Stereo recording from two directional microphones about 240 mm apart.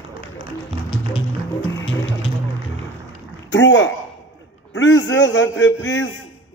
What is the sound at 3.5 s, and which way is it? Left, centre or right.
A man's voice, left.